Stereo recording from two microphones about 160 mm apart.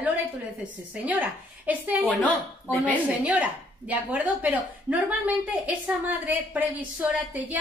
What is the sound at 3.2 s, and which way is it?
A woman's voice, 10° right (ahead or behind).